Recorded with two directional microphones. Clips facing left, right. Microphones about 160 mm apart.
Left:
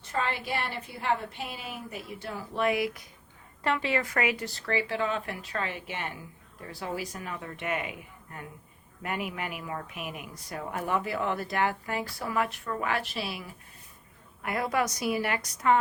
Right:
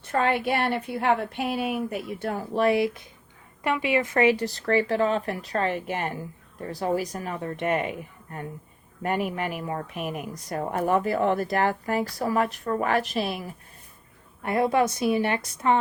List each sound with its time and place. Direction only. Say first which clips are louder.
0.1 s a woman's voice: right 7 dB; 60° right (ahead or behind)
2.6 s a woman's voice: right 5 dB; 30° right (ahead or behind)
3.6 s speech: right 4 dB; 15° right (ahead or behind); by 13.5 s 45° right (ahead or behind)
14.4 s a woman's voice: right 6 dB; 25° right (ahead or behind)